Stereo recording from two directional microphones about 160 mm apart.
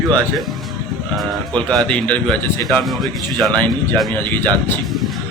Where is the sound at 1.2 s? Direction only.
5° left (ahead or behind).